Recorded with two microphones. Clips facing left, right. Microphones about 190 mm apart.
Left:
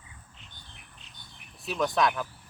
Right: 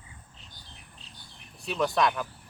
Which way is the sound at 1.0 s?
35° right (ahead or behind).